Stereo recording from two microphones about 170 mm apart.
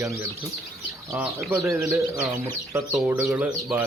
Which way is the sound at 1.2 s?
Centre (ahead or behind).